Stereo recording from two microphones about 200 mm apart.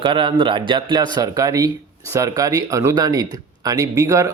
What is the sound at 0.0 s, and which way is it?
Speech, 25° right (ahead or behind).